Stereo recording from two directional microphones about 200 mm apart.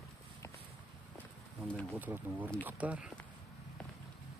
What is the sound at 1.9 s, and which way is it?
Speech, 10° right (ahead or behind).